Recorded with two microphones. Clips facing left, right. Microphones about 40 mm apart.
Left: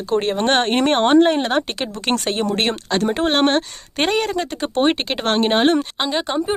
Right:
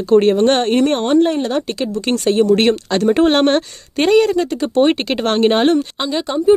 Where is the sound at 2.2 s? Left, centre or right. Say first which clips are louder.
Right 7 dB; left.